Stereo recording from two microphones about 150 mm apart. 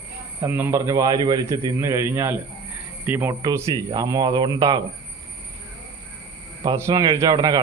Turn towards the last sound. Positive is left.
turn(degrees=-25)  # may be behind; listen again after turning